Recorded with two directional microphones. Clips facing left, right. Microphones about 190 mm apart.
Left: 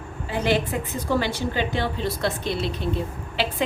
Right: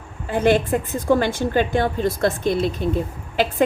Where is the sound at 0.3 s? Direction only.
50° right (ahead or behind).